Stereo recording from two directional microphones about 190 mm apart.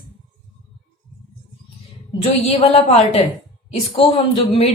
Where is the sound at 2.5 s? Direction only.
35° left (ahead or behind).